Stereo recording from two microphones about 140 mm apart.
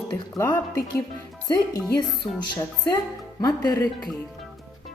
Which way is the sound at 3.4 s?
25° left (ahead or behind).